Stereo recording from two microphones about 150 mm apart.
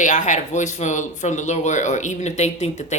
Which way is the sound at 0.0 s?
55° left (ahead or behind).